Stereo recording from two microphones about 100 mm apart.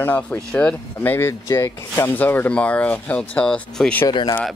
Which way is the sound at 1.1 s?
25° left (ahead or behind).